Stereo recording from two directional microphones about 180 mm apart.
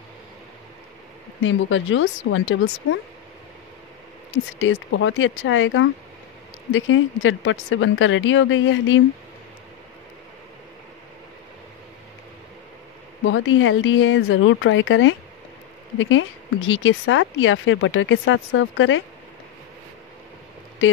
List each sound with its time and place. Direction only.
1.4 s speech: 90° left
4.6 s speech: 90° left
13.2 s speech: 90° left